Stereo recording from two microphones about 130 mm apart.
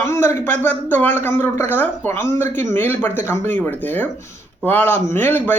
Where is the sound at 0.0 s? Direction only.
20° left (ahead or behind).